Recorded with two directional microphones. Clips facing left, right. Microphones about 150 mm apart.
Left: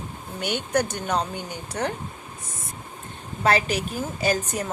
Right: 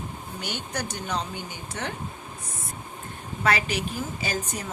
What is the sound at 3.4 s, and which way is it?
Speech, 40° left (ahead or behind).